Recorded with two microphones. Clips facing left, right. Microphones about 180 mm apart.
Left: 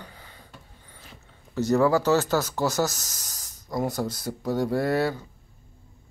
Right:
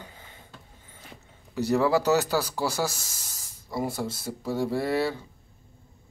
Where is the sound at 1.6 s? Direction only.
10° right (ahead or behind).